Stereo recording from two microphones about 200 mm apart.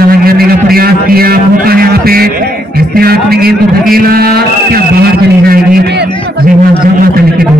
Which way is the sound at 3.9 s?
50° right (ahead or behind).